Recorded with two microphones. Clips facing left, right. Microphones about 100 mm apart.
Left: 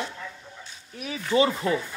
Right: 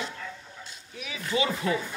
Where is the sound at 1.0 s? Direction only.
40° left (ahead or behind).